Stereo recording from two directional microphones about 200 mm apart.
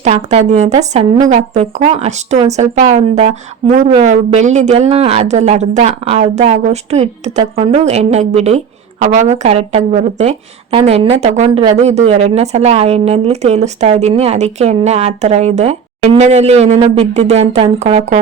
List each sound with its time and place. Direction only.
0.0 s speech: 35° right (ahead or behind)